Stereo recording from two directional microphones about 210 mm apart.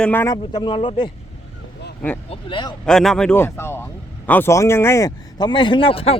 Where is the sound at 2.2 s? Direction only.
25° left (ahead or behind).